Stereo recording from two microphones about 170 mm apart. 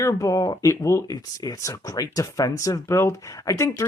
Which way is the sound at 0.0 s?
20° left (ahead or behind).